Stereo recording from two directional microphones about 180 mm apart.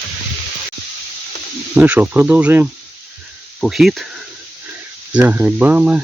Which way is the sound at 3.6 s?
Centre (ahead or behind).